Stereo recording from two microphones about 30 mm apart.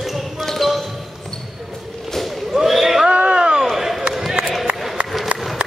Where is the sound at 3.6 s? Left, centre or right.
Centre.